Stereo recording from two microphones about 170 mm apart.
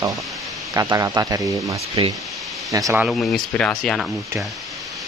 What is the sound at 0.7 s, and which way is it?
Speech, 20° right (ahead or behind).